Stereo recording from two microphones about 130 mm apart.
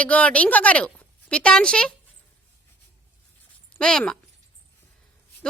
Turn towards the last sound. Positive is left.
turn(degrees=5)  # may be behind; listen again after turning